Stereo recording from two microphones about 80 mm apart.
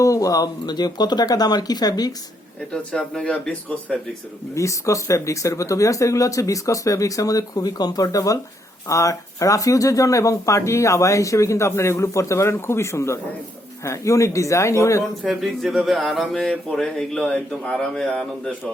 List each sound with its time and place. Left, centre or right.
0.0 s speech: left
2.7 s speech: centre
4.5 s speech: left
15.3 s speech: centre